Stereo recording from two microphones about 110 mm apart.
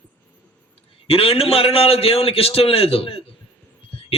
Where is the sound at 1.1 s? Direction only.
60° left (ahead or behind).